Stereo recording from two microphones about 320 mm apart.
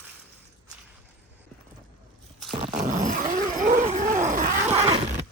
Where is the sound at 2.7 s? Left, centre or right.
Right.